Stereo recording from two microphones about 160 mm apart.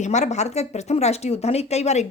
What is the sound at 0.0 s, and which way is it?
Speech, 45° left (ahead or behind).